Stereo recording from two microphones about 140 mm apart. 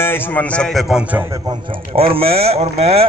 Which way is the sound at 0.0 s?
15° left (ahead or behind).